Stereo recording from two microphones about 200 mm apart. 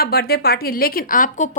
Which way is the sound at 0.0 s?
50° left (ahead or behind).